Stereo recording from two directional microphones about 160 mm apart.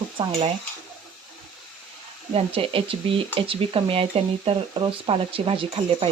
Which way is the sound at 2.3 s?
35° right (ahead or behind).